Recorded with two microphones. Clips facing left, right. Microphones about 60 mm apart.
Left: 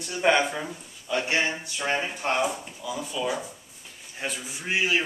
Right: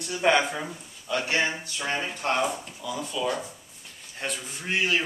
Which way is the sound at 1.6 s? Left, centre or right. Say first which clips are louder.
Left 2 dB; left.